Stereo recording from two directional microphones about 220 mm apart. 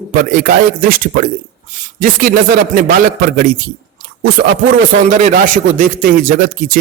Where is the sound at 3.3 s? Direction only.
40° right (ahead or behind).